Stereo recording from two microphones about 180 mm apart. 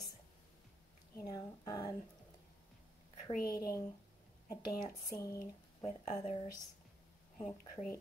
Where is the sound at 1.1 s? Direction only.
20° left (ahead or behind).